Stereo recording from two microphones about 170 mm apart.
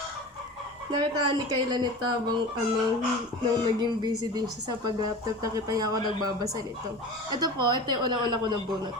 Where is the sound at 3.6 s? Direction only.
25° right (ahead or behind).